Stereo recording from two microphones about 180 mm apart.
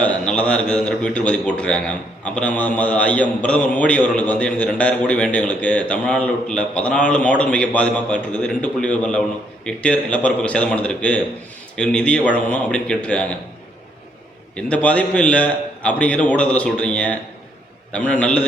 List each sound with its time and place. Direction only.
0.0 s a man's voice: 5° left (ahead or behind)
14.5 s a man's voice: 5° left (ahead or behind)